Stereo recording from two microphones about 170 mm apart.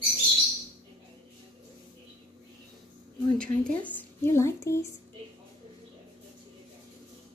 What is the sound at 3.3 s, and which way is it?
Speech, 5° left (ahead or behind).